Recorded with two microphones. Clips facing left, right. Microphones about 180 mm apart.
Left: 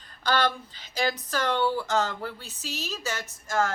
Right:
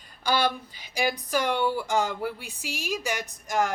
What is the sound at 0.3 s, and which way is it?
Speech, 10° right (ahead or behind).